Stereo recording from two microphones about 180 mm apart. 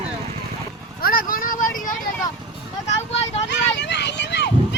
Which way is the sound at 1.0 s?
50° left (ahead or behind).